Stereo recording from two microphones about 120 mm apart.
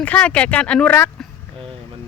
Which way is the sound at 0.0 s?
10° left (ahead or behind).